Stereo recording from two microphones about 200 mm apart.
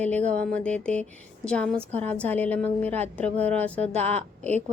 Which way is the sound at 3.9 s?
30° right (ahead or behind).